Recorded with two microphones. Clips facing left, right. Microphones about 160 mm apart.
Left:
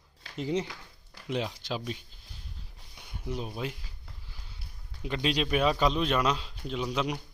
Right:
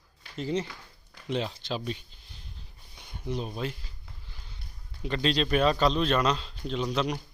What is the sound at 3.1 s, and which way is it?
Speech, 5° left (ahead or behind).